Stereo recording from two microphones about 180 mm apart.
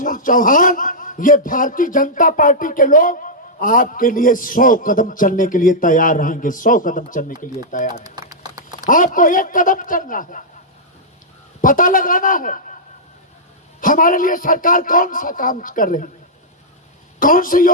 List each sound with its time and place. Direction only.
0.0 s a man's voice: 50° left (ahead or behind)
8.1 s a sound: 20° right (ahead or behind)
9.0 s a man's voice: 45° left (ahead or behind)
11.6 s a man's voice: 50° left (ahead or behind)
13.8 s a man's voice: 50° left (ahead or behind)
17.2 s a man's voice: 50° left (ahead or behind)